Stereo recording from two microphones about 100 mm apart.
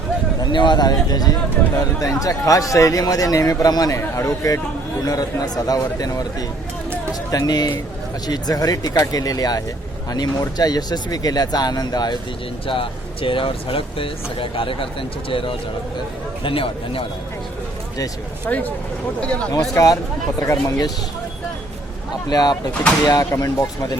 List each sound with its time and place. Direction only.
0.5 s speech: 50° left (ahead or behind)
12.6 s speech: 60° left (ahead or behind)
18.4 s speech: 15° left (ahead or behind)
19.7 s speech: 35° left (ahead or behind)
22.3 s speech: 40° left (ahead or behind)
22.7 s speech: 10° left (ahead or behind)
23.3 s speech: 30° left (ahead or behind)